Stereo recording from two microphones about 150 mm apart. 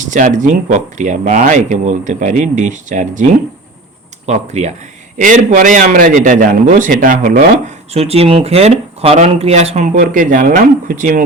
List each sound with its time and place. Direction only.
0.0 s a man's voice: 60° right (ahead or behind)
4.3 s a man's voice: 50° right (ahead or behind)
10.0 s a man's voice: 60° right (ahead or behind)